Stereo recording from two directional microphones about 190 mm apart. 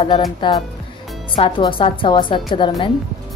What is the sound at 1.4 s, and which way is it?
A woman's voice, 25° left (ahead or behind).